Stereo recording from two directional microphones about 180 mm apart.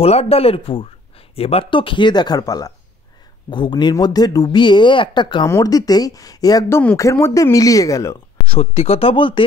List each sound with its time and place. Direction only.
0.0 s a woman's voice: 35° left (ahead or behind); by 8.2 s 15° left (ahead or behind)
8.5 s speech: 35° left (ahead or behind)